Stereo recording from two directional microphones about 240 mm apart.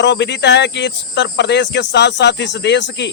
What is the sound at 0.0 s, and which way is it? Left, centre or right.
Speech, left.